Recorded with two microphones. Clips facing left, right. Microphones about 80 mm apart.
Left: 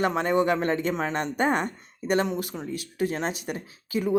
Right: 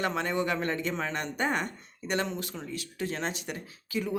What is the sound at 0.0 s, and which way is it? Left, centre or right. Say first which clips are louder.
Speech: left 6 dB; left.